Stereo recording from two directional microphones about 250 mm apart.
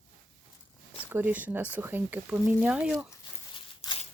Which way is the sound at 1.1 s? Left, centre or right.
Centre.